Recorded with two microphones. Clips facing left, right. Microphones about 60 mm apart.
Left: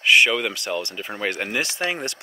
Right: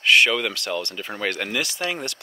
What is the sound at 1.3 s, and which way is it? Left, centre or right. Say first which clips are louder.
Speech: left 1 dB; left.